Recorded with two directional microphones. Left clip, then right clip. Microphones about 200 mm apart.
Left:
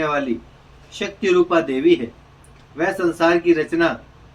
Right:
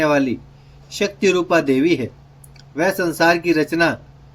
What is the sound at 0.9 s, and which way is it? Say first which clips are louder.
Speech: even; 65° right (ahead or behind).